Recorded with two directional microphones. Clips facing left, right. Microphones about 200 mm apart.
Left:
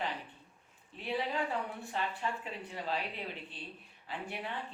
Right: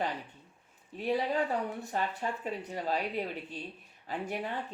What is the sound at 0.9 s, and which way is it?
Speech, 40° right (ahead or behind).